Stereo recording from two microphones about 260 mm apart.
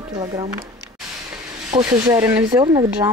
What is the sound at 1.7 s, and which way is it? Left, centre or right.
Speech, centre.